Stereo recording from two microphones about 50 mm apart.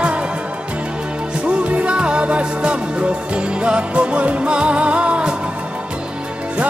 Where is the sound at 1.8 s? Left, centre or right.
Right.